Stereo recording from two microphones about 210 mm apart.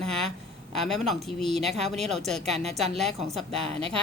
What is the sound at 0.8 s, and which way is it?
Speech, centre (ahead or behind).